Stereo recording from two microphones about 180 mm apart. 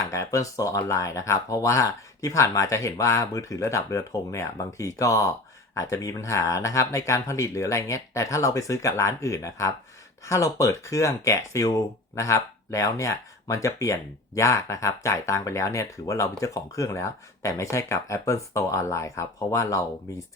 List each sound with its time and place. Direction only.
0.0 s speech: 15° left (ahead or behind)